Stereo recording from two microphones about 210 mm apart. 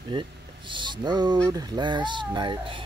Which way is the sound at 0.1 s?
25° right (ahead or behind).